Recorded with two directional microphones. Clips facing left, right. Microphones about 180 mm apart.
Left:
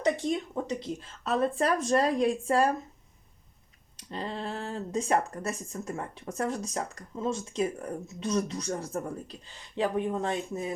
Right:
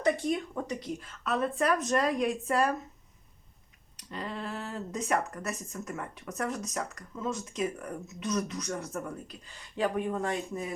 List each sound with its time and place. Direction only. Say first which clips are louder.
0.0 s speech: even; 25° left (ahead or behind)
3.9 s speech: left 2 dB; 30° left (ahead or behind)